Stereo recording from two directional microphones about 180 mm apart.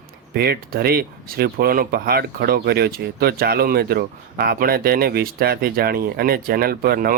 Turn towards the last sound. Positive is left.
turn(degrees=-55)  # may be behind; listen again after turning